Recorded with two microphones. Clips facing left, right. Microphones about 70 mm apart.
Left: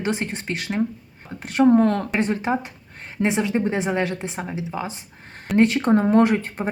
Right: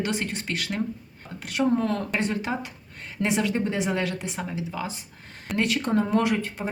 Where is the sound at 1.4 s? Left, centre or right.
Left.